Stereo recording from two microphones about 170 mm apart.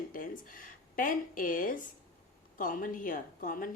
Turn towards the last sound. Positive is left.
turn(degrees=55)  # may be behind; listen again after turning